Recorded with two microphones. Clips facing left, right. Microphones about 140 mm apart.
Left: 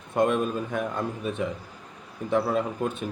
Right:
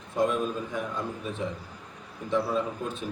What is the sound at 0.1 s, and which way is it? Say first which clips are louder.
A man's voice: left 3 dB; 60° left (ahead or behind).